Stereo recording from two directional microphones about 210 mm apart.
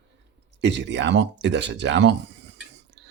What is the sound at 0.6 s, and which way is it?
Speech, 55° right (ahead or behind).